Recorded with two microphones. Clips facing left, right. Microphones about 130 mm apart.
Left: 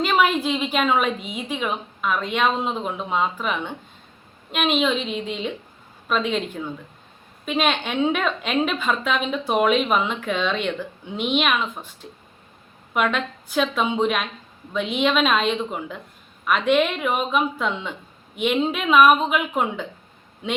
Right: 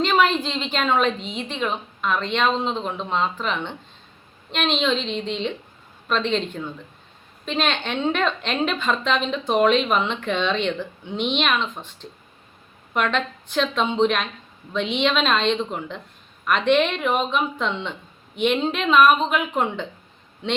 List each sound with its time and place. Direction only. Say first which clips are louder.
0.0 s a woman's voice: even; 10° left (ahead or behind)